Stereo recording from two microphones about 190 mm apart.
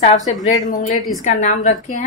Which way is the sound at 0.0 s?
40° left (ahead or behind).